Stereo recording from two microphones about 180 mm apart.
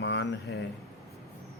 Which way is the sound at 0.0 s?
85° left.